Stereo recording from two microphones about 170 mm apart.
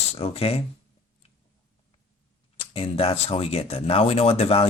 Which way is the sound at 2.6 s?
35° left (ahead or behind).